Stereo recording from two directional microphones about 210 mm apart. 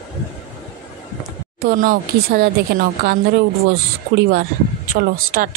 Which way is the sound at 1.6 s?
40° right (ahead or behind).